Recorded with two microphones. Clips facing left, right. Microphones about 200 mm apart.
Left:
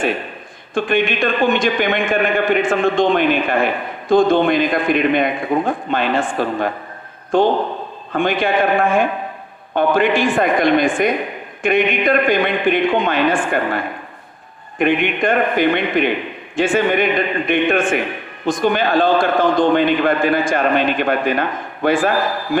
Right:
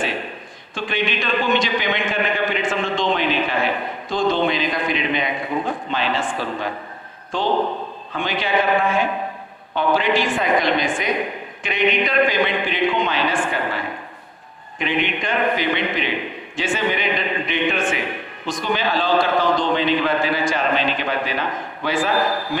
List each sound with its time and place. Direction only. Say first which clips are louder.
0.7 s a man's voice: left 7 dB; 50° left (ahead or behind)